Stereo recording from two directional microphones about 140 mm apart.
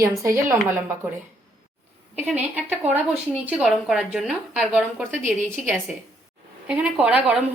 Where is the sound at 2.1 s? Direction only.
15° right (ahead or behind).